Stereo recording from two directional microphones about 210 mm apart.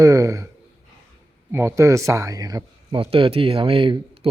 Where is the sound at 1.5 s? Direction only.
15° right (ahead or behind).